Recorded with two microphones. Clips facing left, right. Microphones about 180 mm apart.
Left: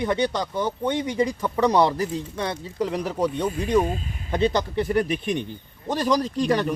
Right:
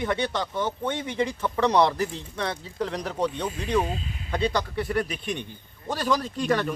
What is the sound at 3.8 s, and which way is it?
Speech, 45° left (ahead or behind).